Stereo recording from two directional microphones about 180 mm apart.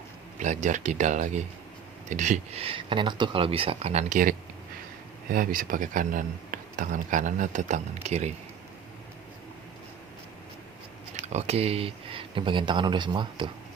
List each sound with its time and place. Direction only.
0.3 s a man's voice: 40° right (ahead or behind)
11.2 s speech: 40° right (ahead or behind)